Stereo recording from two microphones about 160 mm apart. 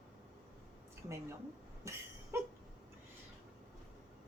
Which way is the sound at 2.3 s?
15° right (ahead or behind).